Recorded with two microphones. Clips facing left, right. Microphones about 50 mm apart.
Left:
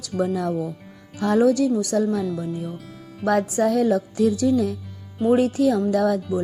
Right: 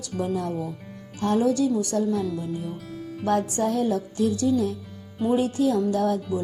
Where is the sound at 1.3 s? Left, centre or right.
Left.